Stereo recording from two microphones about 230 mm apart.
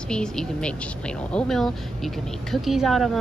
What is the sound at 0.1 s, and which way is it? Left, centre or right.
Speech, centre.